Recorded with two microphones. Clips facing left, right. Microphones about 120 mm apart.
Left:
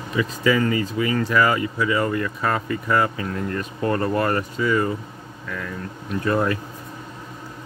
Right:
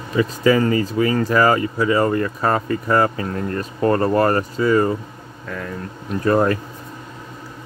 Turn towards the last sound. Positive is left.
turn(degrees=-40)  # may be behind; listen again after turning